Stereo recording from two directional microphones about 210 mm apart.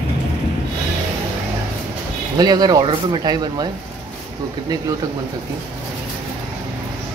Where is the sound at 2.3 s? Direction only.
20° right (ahead or behind).